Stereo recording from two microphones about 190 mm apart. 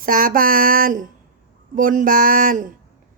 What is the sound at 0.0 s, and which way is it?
A woman's voice, 45° right (ahead or behind).